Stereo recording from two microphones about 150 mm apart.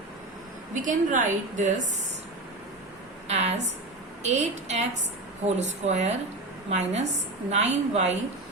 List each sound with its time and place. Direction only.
0.7 s a woman's voice: 60° right (ahead or behind)
3.2 s a woman's voice: 45° right (ahead or behind)